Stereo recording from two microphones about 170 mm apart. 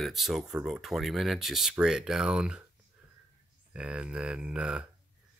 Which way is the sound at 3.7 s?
5° right (ahead or behind).